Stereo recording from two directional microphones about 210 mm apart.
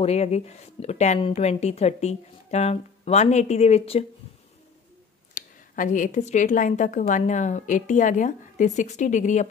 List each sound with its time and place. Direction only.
0.0 s speech: 30° left (ahead or behind)
5.3 s speech: 40° left (ahead or behind)